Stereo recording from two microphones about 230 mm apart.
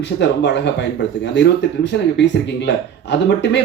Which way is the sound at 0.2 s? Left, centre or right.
Left.